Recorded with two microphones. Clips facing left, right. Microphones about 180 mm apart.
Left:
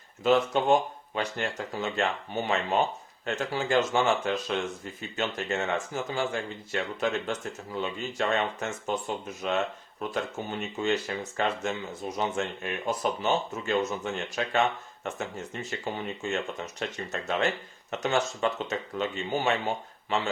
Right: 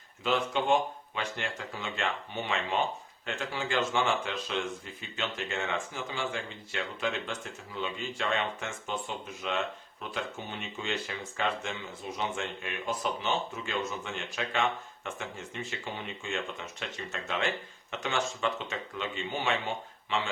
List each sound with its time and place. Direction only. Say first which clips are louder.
0.2 s speech: left 6 dB; 40° left (ahead or behind)
15.8 s speech: left 6 dB; 40° left (ahead or behind)